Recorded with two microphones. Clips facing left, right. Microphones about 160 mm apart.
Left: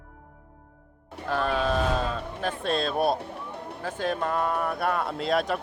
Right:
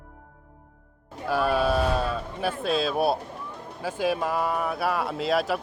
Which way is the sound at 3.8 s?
10° right (ahead or behind).